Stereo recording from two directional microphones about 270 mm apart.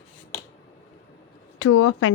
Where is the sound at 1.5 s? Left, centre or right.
Left.